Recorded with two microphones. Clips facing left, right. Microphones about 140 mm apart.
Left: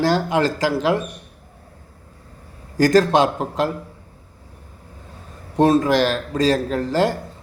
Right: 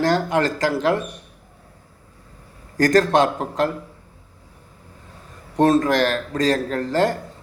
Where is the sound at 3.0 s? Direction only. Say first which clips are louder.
Left 1 dB; 25° left (ahead or behind).